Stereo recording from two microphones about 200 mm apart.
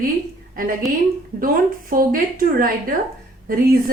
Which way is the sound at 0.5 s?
45° right (ahead or behind).